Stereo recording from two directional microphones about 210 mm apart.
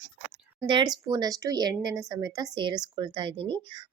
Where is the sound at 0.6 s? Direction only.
20° right (ahead or behind).